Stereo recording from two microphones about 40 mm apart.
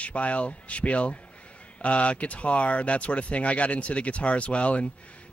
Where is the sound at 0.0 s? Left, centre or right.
Left.